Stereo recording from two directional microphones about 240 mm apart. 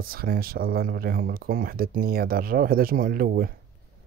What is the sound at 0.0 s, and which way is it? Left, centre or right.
Speech, right.